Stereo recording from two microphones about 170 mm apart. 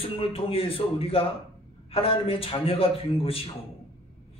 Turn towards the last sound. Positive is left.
turn(degrees=35)  # may be behind; listen again after turning